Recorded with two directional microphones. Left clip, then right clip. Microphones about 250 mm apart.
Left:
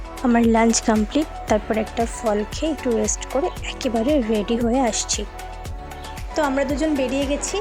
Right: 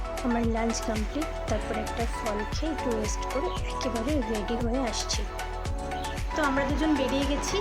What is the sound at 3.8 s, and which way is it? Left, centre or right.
Speech, left.